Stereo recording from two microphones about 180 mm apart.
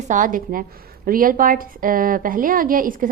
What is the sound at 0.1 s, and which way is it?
A woman's voice, 50° right (ahead or behind).